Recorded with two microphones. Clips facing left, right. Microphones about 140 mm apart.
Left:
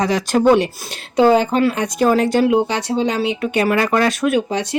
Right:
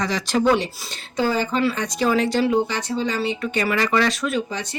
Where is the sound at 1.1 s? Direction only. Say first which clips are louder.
Left 8 dB; 65° left (ahead or behind).